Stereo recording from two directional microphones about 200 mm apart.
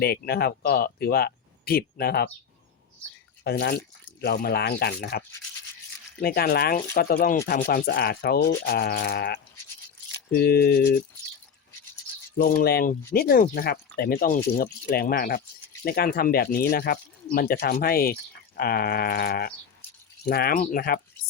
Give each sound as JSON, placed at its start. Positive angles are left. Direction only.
{"t": 0.0, "sound": "speech", "side_deg": 50}
{"t": 3.4, "sound": "speech", "side_deg": 50}
{"t": 6.2, "sound": "speech", "side_deg": 50}
{"t": 12.4, "sound": "speech", "side_deg": 50}